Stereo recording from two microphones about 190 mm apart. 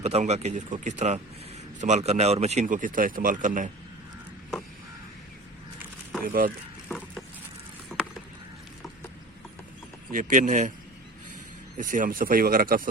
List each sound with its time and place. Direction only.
0.0 s speech: 35° right (ahead or behind)
5.8 s a sound: 5° right (ahead or behind)
6.2 s speech: 50° right (ahead or behind)
10.1 s speech: 45° right (ahead or behind)
11.8 s speech: 45° right (ahead or behind)